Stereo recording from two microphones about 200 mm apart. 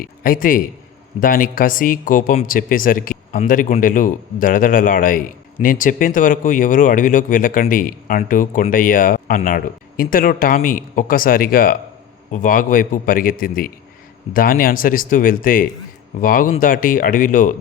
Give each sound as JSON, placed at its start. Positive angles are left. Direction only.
{"t": 0.0, "sound": "speech", "side_deg": 45}